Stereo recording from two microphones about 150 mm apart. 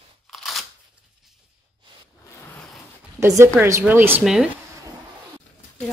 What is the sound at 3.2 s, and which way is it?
A woman's voice, 20° right (ahead or behind).